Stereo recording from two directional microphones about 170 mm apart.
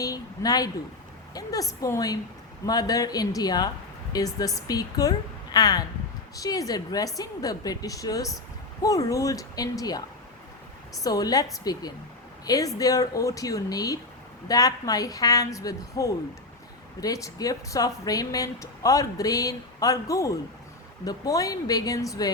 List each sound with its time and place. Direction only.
0.0 s a woman's voice: 20° left (ahead or behind)
11.0 s a woman's voice: 20° left (ahead or behind)